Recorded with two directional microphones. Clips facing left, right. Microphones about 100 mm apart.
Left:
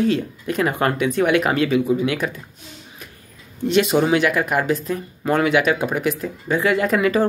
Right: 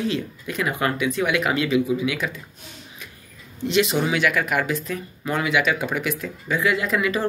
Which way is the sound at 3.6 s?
45° left (ahead or behind).